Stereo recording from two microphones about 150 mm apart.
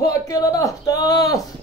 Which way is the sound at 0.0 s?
25° left (ahead or behind).